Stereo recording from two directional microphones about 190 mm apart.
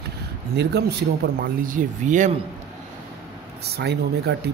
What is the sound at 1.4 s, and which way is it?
Speech, 45° right (ahead or behind).